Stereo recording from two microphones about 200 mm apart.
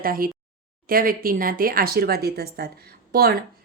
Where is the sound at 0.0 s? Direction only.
45° right (ahead or behind).